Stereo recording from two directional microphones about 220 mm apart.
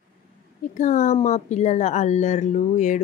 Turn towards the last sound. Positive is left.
turn(degrees=35)  # may be behind; listen again after turning